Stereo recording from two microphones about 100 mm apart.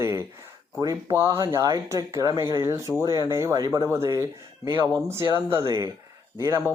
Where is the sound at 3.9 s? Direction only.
30° right (ahead or behind).